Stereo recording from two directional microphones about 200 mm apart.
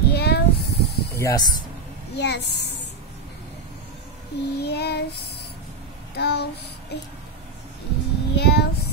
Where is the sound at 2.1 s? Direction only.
60° left (ahead or behind).